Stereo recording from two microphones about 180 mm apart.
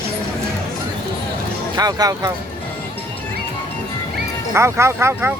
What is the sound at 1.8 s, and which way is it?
Speech, 20° right (ahead or behind).